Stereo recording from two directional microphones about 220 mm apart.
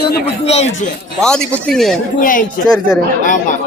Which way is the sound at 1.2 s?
5° left (ahead or behind).